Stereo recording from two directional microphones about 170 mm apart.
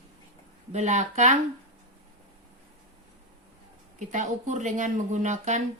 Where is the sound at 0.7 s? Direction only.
45° right (ahead or behind).